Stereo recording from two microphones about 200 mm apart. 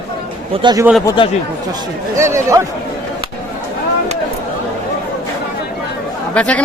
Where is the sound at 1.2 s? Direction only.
25° left (ahead or behind).